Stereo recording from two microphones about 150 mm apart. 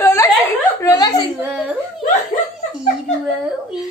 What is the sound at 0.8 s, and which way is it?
Speech, 20° left (ahead or behind).